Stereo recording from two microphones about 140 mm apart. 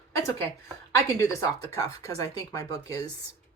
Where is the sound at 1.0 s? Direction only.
25° left (ahead or behind).